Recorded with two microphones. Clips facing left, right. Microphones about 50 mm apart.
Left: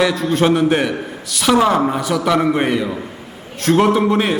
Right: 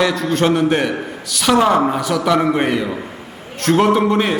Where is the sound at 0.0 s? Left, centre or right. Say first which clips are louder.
Left 1 dB; centre.